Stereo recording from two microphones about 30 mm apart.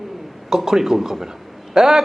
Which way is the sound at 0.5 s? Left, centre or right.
Centre.